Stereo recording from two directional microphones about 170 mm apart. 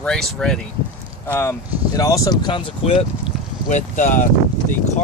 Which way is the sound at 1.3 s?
15° left (ahead or behind).